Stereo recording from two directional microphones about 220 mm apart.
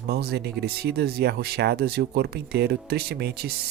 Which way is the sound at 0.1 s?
45° right (ahead or behind).